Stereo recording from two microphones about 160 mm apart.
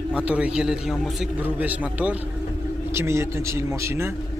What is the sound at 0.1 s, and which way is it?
A man's voice, 5° right (ahead or behind).